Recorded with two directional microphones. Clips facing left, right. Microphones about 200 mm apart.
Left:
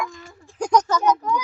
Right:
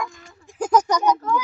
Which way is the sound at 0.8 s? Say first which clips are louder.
Even; 15° right (ahead or behind).